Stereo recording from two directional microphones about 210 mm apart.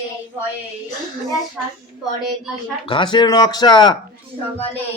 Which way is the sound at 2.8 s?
25° left (ahead or behind).